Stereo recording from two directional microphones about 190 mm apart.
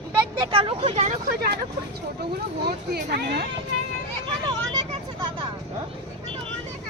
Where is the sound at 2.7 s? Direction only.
60° right (ahead or behind).